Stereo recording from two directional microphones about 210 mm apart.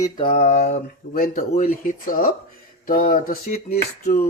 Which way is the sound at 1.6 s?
40° left (ahead or behind).